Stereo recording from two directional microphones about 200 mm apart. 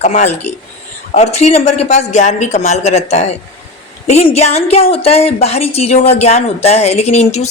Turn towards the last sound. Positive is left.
turn(degrees=35)  # may be behind; listen again after turning